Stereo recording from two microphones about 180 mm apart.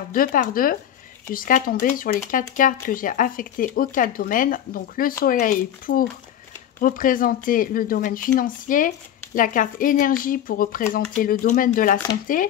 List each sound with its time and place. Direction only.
0.1 s speech: 50° left (ahead or behind)